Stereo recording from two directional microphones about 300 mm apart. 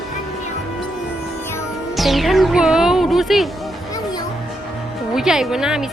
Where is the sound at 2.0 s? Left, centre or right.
Centre.